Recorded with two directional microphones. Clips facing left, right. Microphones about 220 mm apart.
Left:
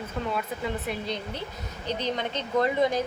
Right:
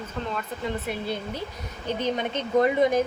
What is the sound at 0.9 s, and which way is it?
Speech, 10° right (ahead or behind).